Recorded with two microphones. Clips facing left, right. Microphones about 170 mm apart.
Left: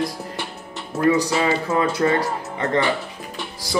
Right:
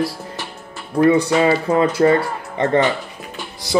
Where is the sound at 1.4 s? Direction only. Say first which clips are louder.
Right 5 dB; 30° right (ahead or behind).